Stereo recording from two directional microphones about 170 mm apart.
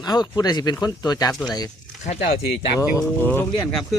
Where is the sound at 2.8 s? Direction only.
15° left (ahead or behind).